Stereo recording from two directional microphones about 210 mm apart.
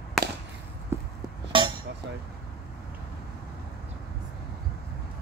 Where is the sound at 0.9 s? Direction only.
10° right (ahead or behind).